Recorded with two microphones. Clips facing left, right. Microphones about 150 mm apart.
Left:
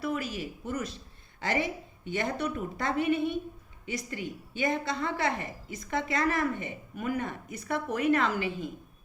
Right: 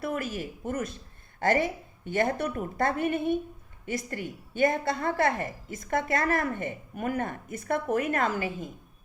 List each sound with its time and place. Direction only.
0.0 s a woman's voice: 50° right (ahead or behind)